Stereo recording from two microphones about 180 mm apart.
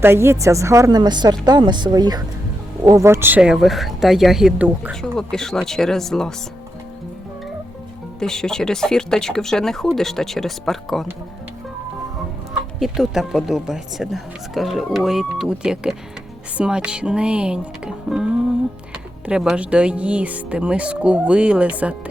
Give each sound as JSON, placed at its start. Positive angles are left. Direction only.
{"t": 0.0, "sound": "speech", "side_deg": -15}
{"t": 4.9, "sound": "speech", "side_deg": 5}
{"t": 8.2, "sound": "speech", "side_deg": 5}
{"t": 12.8, "sound": "speech", "side_deg": 0}